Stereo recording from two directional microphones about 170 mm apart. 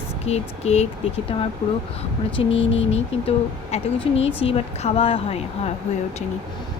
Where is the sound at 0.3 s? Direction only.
40° left (ahead or behind).